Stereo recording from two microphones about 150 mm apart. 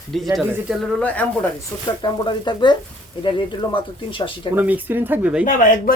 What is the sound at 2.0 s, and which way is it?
Speech, 30° left (ahead or behind).